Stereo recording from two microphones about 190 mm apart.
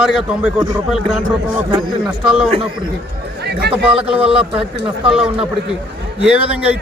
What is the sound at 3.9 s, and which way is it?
Speech, 5° right (ahead or behind).